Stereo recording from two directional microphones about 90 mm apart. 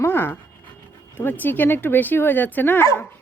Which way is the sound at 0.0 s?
25° left (ahead or behind).